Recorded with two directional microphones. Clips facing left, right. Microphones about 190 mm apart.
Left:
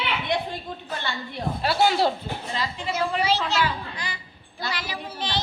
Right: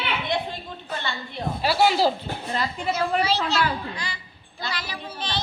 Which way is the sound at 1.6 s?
Centre (ahead or behind).